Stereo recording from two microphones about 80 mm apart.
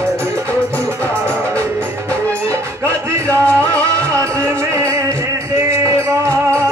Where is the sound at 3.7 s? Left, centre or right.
Right.